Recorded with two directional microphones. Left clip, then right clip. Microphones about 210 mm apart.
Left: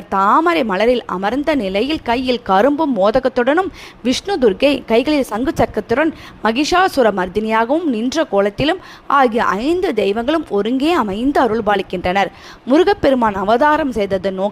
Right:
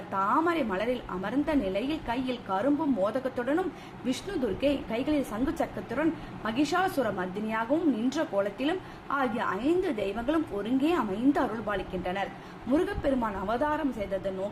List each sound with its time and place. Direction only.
0.1 s a woman's voice: 45° left (ahead or behind)